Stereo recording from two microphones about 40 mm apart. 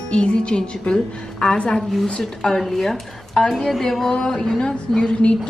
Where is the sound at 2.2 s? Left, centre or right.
Centre.